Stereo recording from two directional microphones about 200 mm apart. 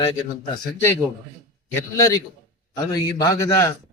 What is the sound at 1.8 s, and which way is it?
A man's voice, 15° left (ahead or behind).